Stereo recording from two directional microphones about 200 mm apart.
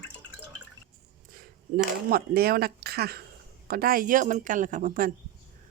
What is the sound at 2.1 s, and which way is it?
Speech, 50° right (ahead or behind).